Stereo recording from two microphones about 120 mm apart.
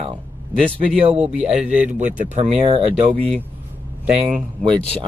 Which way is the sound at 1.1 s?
60° right (ahead or behind).